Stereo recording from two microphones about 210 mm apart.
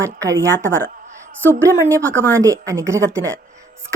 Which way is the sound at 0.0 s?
15° right (ahead or behind).